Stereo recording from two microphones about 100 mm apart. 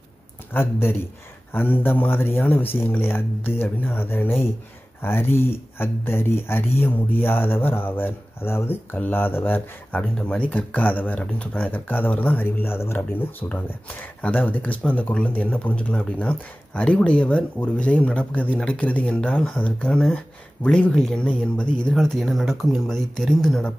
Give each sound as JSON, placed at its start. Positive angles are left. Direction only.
{"t": 0.5, "sound": "speech", "side_deg": 25}
{"t": 10.1, "sound": "speech", "side_deg": 10}